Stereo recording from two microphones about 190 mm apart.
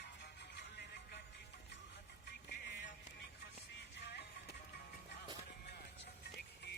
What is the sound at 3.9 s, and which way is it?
Music, 60° left (ahead or behind).